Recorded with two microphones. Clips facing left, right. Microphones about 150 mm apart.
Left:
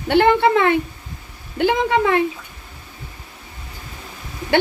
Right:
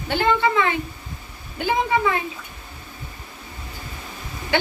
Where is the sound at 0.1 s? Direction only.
65° left (ahead or behind).